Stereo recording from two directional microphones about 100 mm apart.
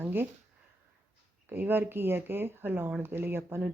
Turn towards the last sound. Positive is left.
turn(degrees=-25)  # may be behind; listen again after turning